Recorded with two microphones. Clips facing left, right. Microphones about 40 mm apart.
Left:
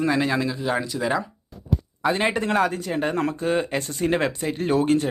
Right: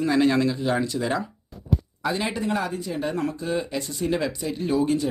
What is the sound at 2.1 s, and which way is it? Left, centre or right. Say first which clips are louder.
Speech: left 4 dB; left.